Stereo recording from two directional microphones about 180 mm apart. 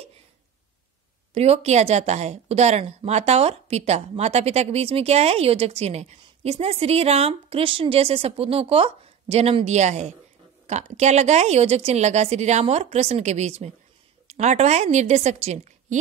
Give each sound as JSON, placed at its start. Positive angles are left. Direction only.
{"t": 1.3, "sound": "speech", "side_deg": -35}